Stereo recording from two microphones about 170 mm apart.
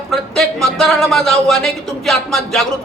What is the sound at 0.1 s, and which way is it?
A man's voice, centre (ahead or behind).